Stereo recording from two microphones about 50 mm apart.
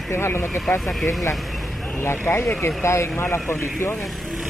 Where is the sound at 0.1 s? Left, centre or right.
Left.